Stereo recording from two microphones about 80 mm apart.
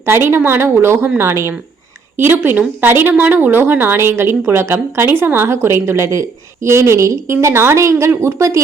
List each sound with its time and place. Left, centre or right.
0.0 s a woman's voice: right